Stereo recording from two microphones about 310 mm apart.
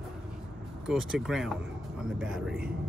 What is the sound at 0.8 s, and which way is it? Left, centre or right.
Speech, centre.